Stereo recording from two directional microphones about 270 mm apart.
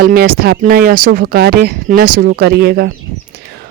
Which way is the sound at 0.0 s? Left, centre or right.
Right.